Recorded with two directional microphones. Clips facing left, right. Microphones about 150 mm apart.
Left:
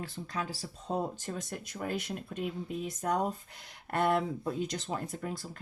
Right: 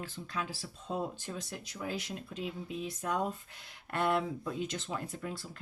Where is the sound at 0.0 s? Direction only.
40° left (ahead or behind).